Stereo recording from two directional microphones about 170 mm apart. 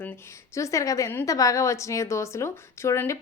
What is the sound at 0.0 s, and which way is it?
A woman's voice, 15° left (ahead or behind).